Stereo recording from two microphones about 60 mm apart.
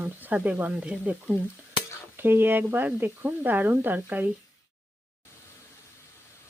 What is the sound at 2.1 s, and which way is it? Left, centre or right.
Speech, right.